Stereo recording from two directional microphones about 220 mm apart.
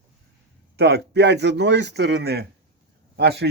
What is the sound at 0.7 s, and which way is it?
A man's voice, 50° right (ahead or behind).